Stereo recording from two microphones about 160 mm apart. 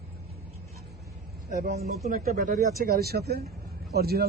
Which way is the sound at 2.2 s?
65° right (ahead or behind).